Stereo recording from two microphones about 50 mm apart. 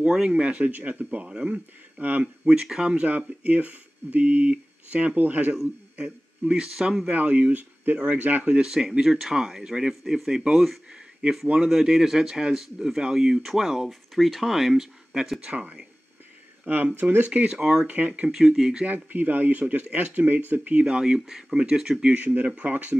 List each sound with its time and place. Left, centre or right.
0.1 s speech: centre; by 2.2 s right
2.4 s speech: centre
3.0 s speech: right
5.9 s speech: right
6.7 s speech: centre
7.1 s speech: right
8.6 s speech: centre
16.6 s speech: right; by 17.8 s centre
17.8 s speech: right
18.3 s speech: centre
19.1 s speech: right
20.8 s speech: centre
22.1 s speech: right